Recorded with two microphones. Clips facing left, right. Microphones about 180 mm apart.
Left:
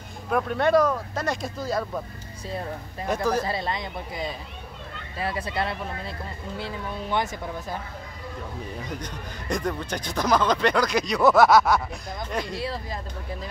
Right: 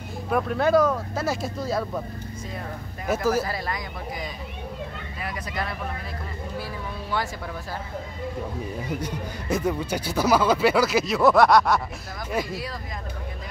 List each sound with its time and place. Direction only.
0.3 s speech: centre (ahead or behind)
3.1 s speech: 5° right (ahead or behind)
3.4 s speech: 25° left (ahead or behind)
8.8 s speech: 10° right (ahead or behind)